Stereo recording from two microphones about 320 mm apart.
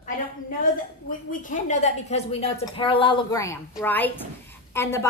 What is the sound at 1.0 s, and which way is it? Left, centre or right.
A woman's voice, left.